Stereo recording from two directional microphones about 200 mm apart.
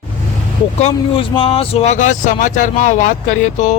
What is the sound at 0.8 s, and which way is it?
Speech, 25° left (ahead or behind).